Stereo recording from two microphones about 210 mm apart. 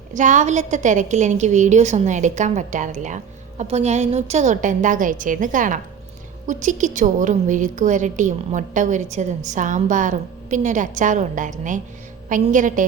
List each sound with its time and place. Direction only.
0.1 s a woman's voice: 35° right (ahead or behind)